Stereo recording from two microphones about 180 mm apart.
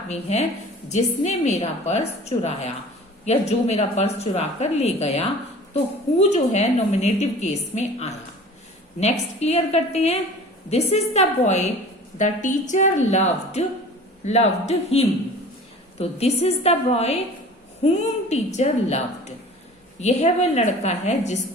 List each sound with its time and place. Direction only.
0.1 s a woman's voice: 40° left (ahead or behind)